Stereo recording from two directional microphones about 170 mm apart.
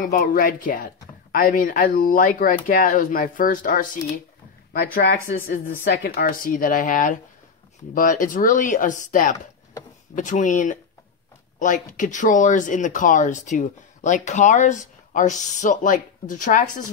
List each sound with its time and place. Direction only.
0.0 s speech: 55° left (ahead or behind)
5.9 s speech: 70° left (ahead or behind); by 16.8 s 50° left (ahead or behind)